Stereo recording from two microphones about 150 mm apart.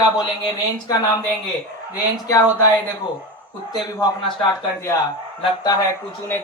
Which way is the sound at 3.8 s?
25° left (ahead or behind).